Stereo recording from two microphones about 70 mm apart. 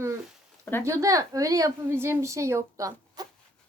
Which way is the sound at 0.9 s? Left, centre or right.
Right.